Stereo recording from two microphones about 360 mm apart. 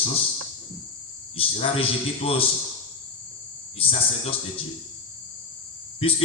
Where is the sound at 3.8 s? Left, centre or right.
Centre.